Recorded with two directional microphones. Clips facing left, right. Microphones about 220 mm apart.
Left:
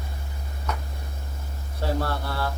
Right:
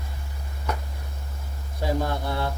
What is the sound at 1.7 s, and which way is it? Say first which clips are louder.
Speech: right 1 dB; 15° right (ahead or behind).